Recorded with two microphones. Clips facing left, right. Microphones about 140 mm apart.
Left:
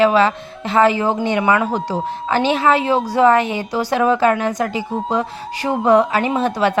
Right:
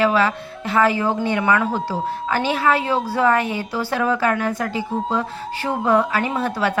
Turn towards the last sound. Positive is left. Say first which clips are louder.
# left 4 dB
turn(degrees=20)  # may be behind; listen again after turning